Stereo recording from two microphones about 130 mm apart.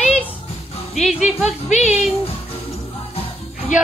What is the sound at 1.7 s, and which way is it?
Speech, 60° left (ahead or behind).